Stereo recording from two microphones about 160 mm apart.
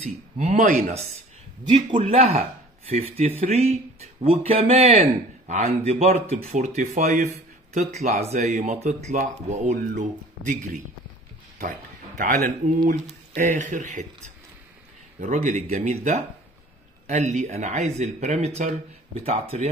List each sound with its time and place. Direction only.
0.0 s speech: 45° right (ahead or behind)
1.6 s a man's voice: 30° right (ahead or behind); by 10.8 s 50° right (ahead or behind)
12.2 s speech: 55° right (ahead or behind)